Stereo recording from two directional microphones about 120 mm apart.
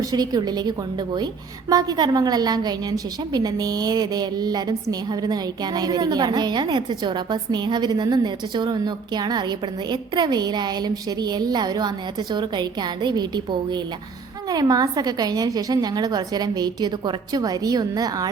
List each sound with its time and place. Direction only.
0.1 s a woman's voice: 35° right (ahead or behind)
1.7 s a woman's voice: 30° right (ahead or behind)